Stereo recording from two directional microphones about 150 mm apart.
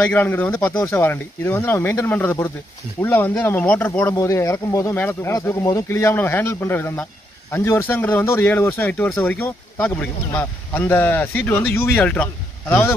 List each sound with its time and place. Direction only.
0.1 s speech: 10° left (ahead or behind)